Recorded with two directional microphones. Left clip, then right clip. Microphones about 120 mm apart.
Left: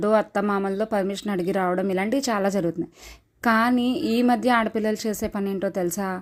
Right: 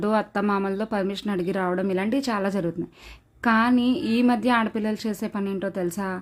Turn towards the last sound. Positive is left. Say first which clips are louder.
# left 2 dB
turn(degrees=35)  # may be behind; listen again after turning